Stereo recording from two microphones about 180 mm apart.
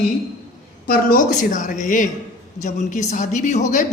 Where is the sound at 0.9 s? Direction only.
50° left (ahead or behind).